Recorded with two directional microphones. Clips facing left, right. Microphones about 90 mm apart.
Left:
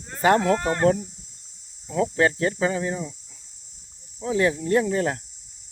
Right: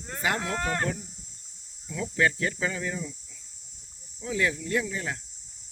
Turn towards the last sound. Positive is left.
turn(degrees=45)  # may be behind; listen again after turning